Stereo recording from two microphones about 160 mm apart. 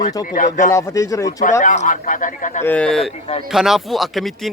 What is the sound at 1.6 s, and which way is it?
Speech, 50° left (ahead or behind).